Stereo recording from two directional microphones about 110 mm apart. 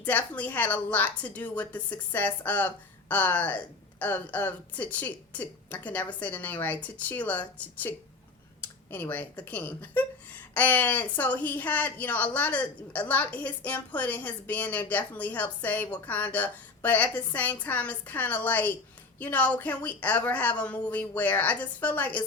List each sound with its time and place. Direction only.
0.0 s a woman's voice: 15° left (ahead or behind)